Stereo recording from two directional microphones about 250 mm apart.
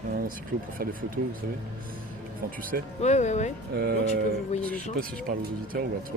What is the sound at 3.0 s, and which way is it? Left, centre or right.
Speech, left.